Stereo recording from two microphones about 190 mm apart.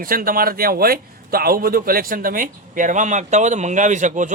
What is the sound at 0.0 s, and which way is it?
A man's voice, 50° right (ahead or behind).